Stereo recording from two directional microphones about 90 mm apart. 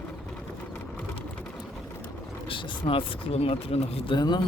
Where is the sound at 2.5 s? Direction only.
70° left (ahead or behind).